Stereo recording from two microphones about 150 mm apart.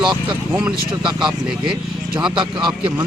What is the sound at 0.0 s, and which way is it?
Speech, 30° right (ahead or behind).